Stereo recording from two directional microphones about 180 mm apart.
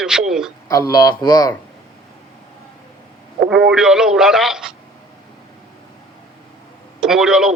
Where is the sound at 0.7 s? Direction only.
20° left (ahead or behind).